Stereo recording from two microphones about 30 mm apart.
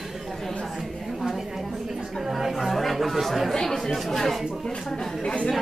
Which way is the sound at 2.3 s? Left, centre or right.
Centre.